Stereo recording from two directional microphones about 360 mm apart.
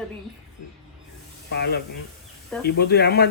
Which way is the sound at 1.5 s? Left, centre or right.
Left.